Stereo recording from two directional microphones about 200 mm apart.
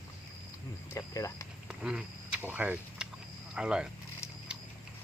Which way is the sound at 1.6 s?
5° right (ahead or behind).